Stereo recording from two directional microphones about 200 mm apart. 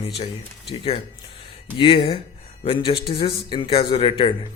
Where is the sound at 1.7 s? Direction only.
25° left (ahead or behind).